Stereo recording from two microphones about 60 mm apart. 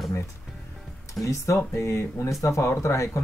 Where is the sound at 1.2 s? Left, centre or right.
Left.